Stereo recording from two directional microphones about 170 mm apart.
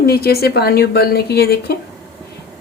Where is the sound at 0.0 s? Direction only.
65° left (ahead or behind).